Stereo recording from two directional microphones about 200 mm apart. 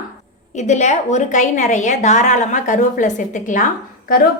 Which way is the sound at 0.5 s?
35° left (ahead or behind).